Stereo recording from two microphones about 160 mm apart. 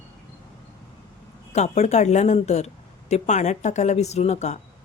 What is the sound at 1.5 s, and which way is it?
Speech, 45° left (ahead or behind).